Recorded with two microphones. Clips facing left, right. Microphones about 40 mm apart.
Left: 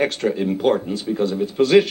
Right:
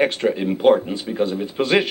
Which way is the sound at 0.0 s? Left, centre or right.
Centre.